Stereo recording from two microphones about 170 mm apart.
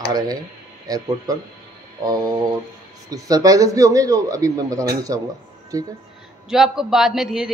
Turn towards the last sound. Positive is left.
turn(degrees=0)  # may be behind; listen again after turning